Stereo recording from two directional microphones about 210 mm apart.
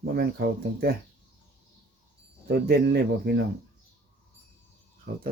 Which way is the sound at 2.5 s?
50° right (ahead or behind).